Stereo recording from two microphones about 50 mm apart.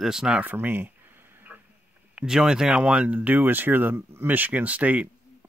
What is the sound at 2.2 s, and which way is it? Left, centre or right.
Speech, centre.